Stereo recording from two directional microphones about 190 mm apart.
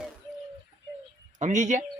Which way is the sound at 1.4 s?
40° right (ahead or behind).